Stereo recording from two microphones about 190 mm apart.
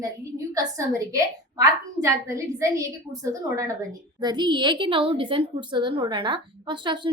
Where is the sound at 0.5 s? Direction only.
15° right (ahead or behind).